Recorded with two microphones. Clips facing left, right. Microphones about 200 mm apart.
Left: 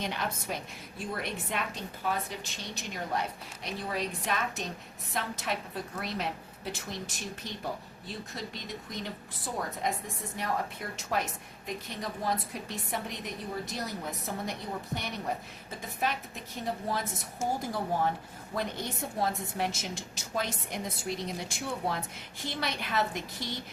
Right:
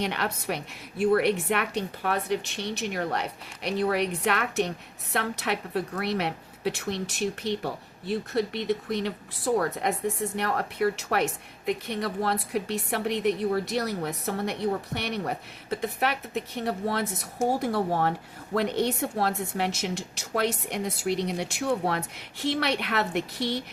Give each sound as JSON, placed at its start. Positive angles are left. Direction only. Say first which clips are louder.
{"t": 0.0, "sound": "a woman's voice", "louder": "right 5 dB", "side_deg": -65}